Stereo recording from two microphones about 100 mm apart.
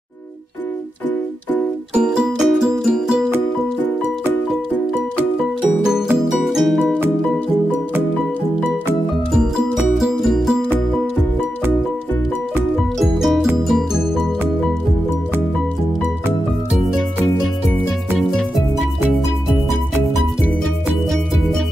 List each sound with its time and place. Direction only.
2.0 s music: 5° right (ahead or behind)
6.1 s music: 5° right (ahead or behind)
9.8 s music: 5° right (ahead or behind)
13.0 s music: centre (ahead or behind)
18.1 s music: centre (ahead or behind)